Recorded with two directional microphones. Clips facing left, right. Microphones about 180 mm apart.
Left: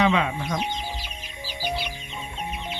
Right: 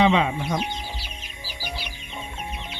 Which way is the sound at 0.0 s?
25° right (ahead or behind).